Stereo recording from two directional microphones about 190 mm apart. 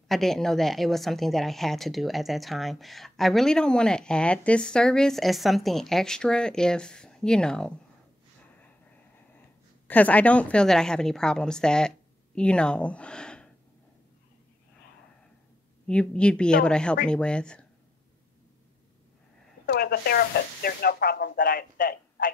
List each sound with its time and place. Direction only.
0.1 s a woman's voice: centre (ahead or behind)
9.8 s a woman's voice: 10° left (ahead or behind)
15.9 s a woman's voice: 5° left (ahead or behind)
19.6 s a sound: 55° left (ahead or behind)